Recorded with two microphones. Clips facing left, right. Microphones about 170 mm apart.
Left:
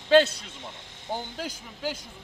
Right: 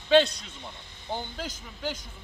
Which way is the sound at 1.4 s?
10° left (ahead or behind).